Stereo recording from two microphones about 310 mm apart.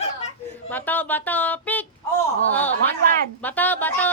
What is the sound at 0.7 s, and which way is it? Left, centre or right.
Speech, centre.